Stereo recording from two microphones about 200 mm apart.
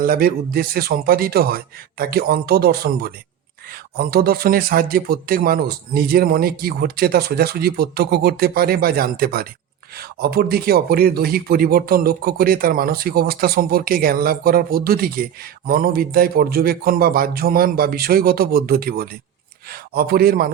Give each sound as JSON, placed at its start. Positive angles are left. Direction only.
{"t": 0.0, "sound": "a man's voice", "side_deg": -45}